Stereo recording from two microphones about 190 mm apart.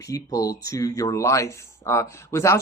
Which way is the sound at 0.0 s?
15° left (ahead or behind).